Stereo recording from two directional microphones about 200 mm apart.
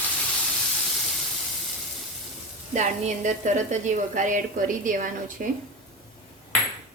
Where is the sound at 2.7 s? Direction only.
35° right (ahead or behind).